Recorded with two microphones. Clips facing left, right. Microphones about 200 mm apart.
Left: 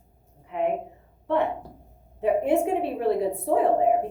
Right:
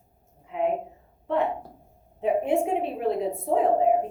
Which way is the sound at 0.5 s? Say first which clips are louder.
Even; 60° left (ahead or behind).